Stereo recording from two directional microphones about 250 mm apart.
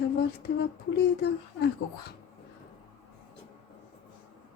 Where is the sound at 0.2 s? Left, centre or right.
Left.